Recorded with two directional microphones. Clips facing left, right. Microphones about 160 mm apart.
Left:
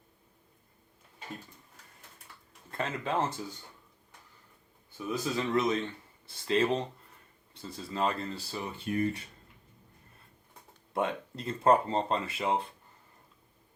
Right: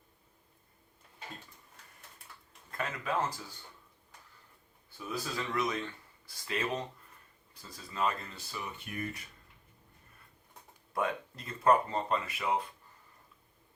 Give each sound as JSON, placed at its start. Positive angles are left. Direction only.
{"t": 2.7, "sound": "speech", "side_deg": 25}
{"t": 5.1, "sound": "speech", "side_deg": 25}
{"t": 10.9, "sound": "speech", "side_deg": 30}